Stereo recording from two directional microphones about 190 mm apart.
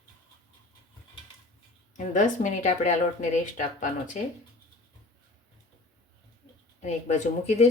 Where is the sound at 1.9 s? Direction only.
40° left (ahead or behind).